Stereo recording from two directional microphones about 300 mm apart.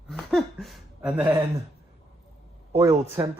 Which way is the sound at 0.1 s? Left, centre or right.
Centre.